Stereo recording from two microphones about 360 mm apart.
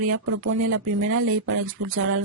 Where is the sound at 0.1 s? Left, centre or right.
Right.